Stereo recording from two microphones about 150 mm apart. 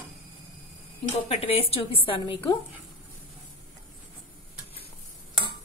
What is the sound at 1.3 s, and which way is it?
A woman's voice, 40° left (ahead or behind).